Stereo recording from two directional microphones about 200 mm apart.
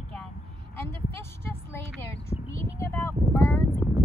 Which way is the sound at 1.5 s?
15° left (ahead or behind).